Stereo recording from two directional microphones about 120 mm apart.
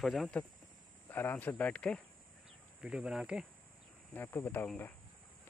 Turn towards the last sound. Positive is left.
turn(degrees=15)  # may be behind; listen again after turning